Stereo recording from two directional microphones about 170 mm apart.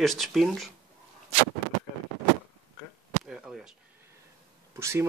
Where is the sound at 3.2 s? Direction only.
Centre (ahead or behind).